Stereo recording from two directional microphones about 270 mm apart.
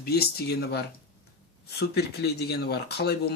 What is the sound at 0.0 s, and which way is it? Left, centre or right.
Speech, left.